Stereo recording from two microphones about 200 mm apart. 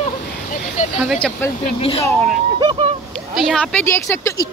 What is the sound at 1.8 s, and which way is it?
Speech, 30° left (ahead or behind).